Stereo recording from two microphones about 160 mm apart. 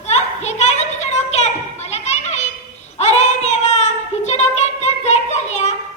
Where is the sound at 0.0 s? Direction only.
45° left (ahead or behind).